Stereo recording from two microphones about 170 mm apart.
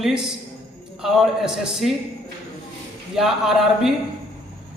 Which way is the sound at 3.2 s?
Centre (ahead or behind).